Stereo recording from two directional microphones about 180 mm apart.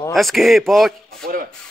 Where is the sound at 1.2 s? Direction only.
55° right (ahead or behind).